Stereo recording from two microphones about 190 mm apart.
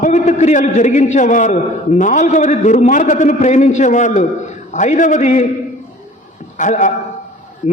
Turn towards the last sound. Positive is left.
turn(degrees=40)  # may be behind; listen again after turning